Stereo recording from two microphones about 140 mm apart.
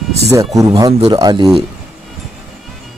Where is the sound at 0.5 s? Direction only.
25° right (ahead or behind).